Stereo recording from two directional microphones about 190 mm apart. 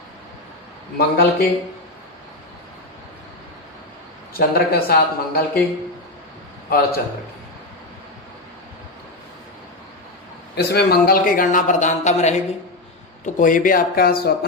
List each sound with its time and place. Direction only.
0.9 s a man's voice: 55° left (ahead or behind)
4.4 s a man's voice: 55° left (ahead or behind)
6.7 s a man's voice: 50° left (ahead or behind)
10.5 s a man's voice: 55° left (ahead or behind)